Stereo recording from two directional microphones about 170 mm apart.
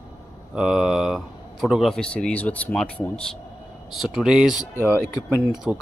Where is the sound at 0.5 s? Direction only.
5° right (ahead or behind).